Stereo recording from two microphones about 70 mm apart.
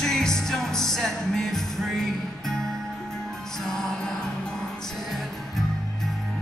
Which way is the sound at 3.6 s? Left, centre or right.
Centre.